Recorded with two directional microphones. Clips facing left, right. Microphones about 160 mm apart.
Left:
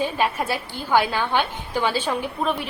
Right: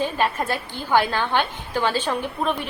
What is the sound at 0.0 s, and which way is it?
A woman's voice, 10° left (ahead or behind).